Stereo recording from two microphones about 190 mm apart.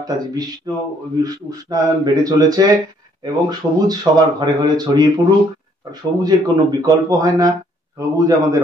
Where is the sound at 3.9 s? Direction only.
20° right (ahead or behind).